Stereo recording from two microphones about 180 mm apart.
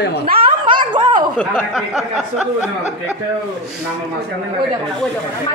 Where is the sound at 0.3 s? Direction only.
25° right (ahead or behind).